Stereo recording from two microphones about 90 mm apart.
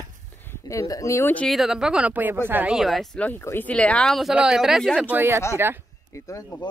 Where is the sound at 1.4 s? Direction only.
Centre (ahead or behind); by 2.7 s 20° right (ahead or behind).